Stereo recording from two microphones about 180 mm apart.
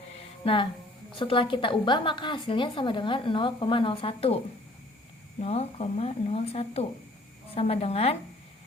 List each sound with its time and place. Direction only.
0.4 s a woman's voice: 30° left (ahead or behind)
5.4 s speech: 35° left (ahead or behind)